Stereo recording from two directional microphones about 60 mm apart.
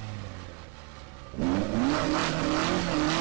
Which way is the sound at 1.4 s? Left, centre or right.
Right.